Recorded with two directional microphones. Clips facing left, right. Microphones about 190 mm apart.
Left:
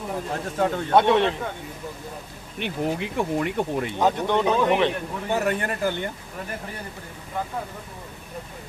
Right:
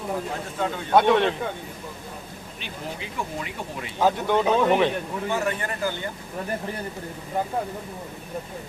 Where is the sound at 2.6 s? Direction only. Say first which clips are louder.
Left 10 dB; 60° left (ahead or behind).